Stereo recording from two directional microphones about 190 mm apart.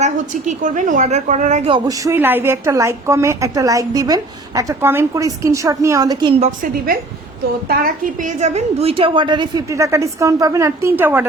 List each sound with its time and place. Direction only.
0.0 s a woman's voice: 40° right (ahead or behind)
1.9 s a woman's voice: 15° right (ahead or behind)
6.4 s a woman's voice: 45° right (ahead or behind); by 11.3 s 10° right (ahead or behind)